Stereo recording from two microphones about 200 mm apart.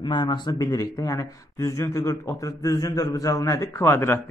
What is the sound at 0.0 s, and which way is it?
Speech, 25° left (ahead or behind).